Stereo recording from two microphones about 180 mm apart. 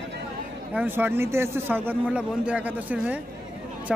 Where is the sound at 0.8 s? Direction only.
10° right (ahead or behind).